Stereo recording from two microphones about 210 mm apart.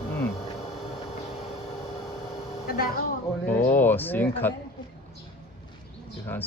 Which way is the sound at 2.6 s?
45° left (ahead or behind).